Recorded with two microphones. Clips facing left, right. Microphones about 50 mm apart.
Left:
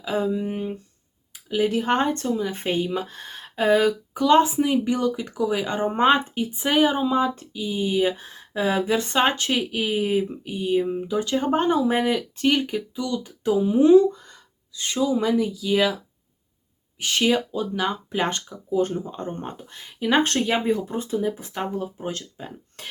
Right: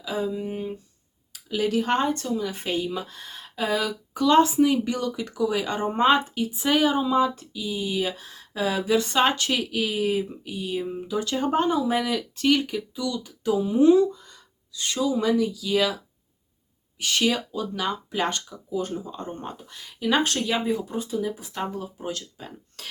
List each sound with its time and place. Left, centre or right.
0.0 s speech: left
1.3 s speech: left
4.1 s speech: left
14.1 s speech: left
17.0 s speech: left